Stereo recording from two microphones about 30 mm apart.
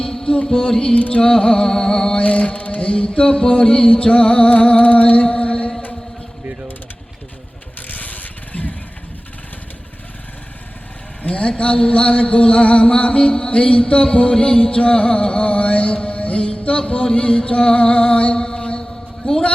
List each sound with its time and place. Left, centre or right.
0.0 s music: centre
0.9 s mantra: left
1.2 s music: left
2.1 s mantra: left
2.8 s music: left
4.4 s music: left
7.8 s vehicle: left
11.2 s music: left
18.3 s mantra: left